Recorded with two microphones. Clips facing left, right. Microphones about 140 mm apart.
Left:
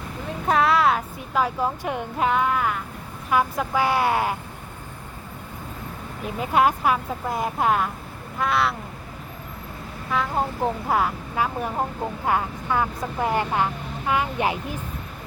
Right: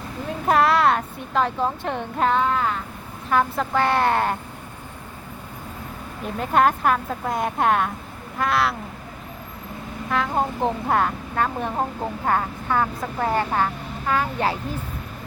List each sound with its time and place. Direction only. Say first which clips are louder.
0.3 s speech: right 2 dB; centre (ahead or behind)
6.2 s speech: right 1 dB; 5° left (ahead or behind)
10.1 s a sound: right 1 dB; centre (ahead or behind)
10.6 s speech: right 1 dB; 5° left (ahead or behind)